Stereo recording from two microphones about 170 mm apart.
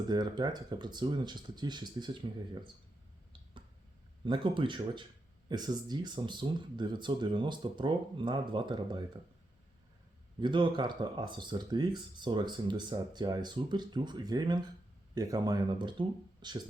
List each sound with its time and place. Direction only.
0.1 s speech: 25° right (ahead or behind)
4.3 s speech: 30° right (ahead or behind)
10.4 s speech: 30° right (ahead or behind)